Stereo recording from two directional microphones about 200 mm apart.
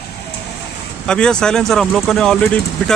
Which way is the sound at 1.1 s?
5° left (ahead or behind).